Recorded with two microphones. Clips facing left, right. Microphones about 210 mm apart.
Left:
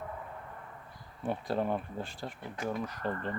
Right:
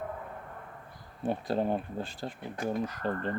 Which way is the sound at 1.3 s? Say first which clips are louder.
Right 2 dB; 30° right (ahead or behind).